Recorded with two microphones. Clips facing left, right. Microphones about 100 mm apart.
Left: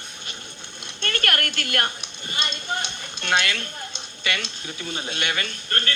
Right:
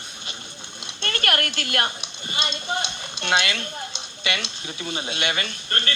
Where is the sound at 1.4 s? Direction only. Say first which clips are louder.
Even; 50° left (ahead or behind).